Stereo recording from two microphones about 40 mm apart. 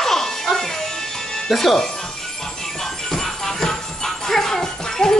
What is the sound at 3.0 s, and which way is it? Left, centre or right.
Music, centre.